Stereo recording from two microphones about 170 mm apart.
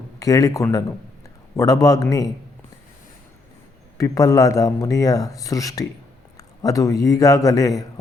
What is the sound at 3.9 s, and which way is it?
A man's voice, 20° left (ahead or behind).